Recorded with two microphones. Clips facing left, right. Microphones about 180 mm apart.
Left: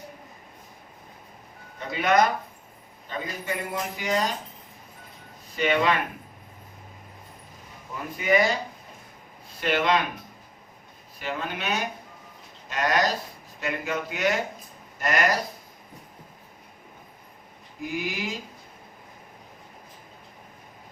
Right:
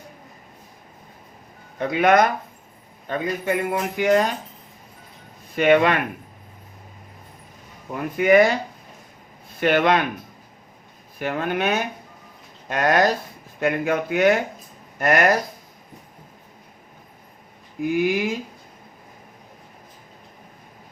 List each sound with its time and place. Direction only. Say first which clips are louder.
1.8 s speech: right 5 dB; 55° right (ahead or behind)
5.5 s speech: right 7 dB; 55° right (ahead or behind)
7.9 s speech: right 8 dB; 60° right (ahead or behind)
9.6 s speech: right 5 dB; 55° right (ahead or behind)
11.2 s speech: right 8 dB; 55° right (ahead or behind)
17.7 s speech: right 10 dB; 55° right (ahead or behind)